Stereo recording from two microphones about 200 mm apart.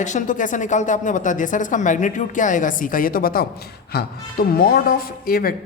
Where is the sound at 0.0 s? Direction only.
40° left (ahead or behind).